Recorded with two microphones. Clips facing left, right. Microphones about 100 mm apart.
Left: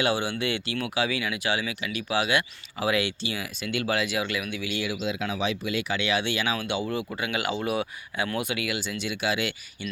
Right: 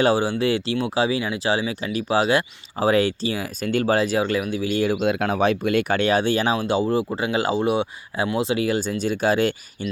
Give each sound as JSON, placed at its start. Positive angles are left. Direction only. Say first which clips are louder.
{"t": 0.0, "sound": "speech", "louder": "right 7 dB", "side_deg": -35}